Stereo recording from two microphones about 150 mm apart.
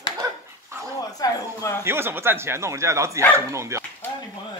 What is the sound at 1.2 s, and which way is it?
Speech, 25° left (ahead or behind).